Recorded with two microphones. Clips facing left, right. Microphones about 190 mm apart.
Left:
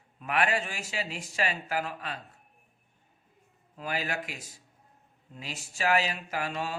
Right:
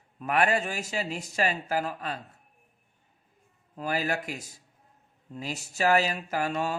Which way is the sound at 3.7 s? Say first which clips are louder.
Right 4 dB; 40° right (ahead or behind).